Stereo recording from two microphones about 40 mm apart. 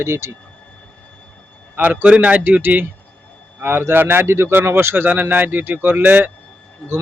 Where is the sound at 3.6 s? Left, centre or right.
Right.